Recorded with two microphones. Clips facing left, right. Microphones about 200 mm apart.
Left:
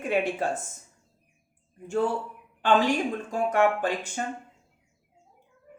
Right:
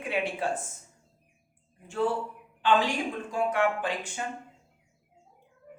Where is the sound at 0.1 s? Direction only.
45° left (ahead or behind).